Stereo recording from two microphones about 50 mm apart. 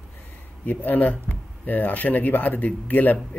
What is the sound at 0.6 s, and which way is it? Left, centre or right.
Speech, left.